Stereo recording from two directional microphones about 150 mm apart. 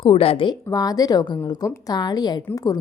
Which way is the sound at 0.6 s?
25° left (ahead or behind).